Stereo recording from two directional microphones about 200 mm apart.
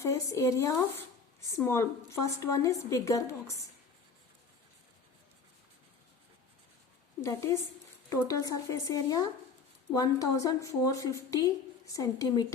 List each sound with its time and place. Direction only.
0.0 s speech: 15° left (ahead or behind)
7.2 s speech: 15° left (ahead or behind)